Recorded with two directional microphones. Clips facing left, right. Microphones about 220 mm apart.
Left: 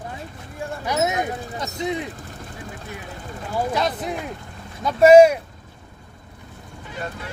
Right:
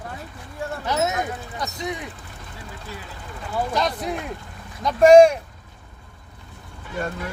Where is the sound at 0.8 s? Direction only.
15° left (ahead or behind).